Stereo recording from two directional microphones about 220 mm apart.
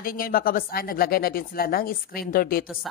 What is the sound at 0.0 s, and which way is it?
A woman's voice, 40° left (ahead or behind).